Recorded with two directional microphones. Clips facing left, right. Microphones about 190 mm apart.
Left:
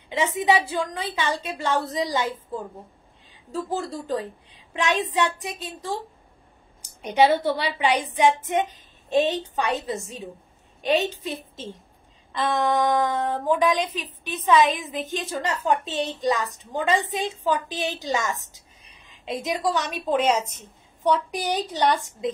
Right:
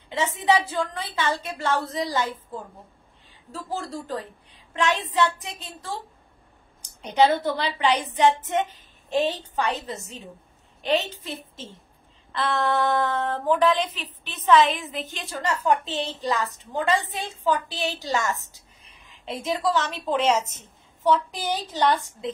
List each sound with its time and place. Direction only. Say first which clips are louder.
0.1 s a woman's voice: left 1 dB; 15° left (ahead or behind)
3.9 s a woman's voice: left 4 dB; 20° left (ahead or behind)